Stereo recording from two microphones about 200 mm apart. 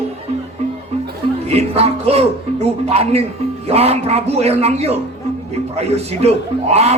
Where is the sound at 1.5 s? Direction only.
30° right (ahead or behind).